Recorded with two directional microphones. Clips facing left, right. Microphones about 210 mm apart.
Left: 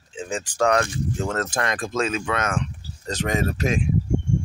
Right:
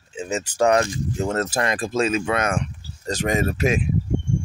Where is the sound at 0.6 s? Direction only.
10° right (ahead or behind).